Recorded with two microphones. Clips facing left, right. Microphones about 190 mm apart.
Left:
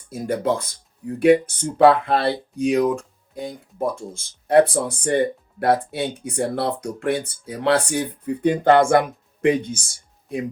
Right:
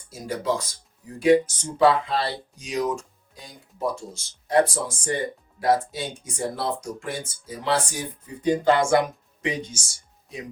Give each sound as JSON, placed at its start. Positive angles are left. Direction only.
{"t": 0.1, "sound": "speech", "side_deg": 55}